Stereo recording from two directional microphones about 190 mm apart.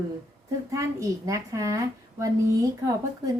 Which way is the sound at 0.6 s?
15° right (ahead or behind).